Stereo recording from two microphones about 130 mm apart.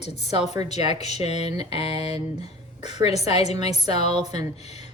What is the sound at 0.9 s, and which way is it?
A woman's voice, 55° left (ahead or behind).